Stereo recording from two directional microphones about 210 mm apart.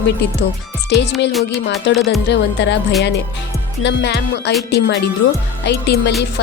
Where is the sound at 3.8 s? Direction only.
55° left (ahead or behind).